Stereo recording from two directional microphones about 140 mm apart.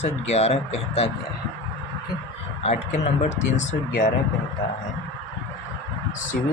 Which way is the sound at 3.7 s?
90° left.